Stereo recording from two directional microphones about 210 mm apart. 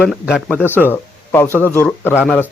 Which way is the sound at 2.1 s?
5° right (ahead or behind).